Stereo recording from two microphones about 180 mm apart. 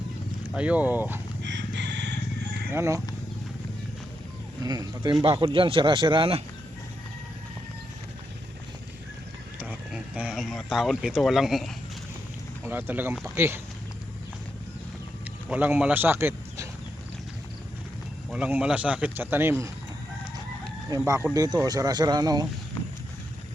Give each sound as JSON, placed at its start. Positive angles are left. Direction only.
{"t": 0.5, "sound": "speech", "side_deg": -5}
{"t": 1.4, "sound": "chicken", "side_deg": -75}
{"t": 2.6, "sound": "speech", "side_deg": -15}
{"t": 4.6, "sound": "speech", "side_deg": -20}
{"t": 9.6, "sound": "speech", "side_deg": -5}
{"t": 15.4, "sound": "speech", "side_deg": -10}
{"t": 18.3, "sound": "speech", "side_deg": -5}
{"t": 20.9, "sound": "speech", "side_deg": -15}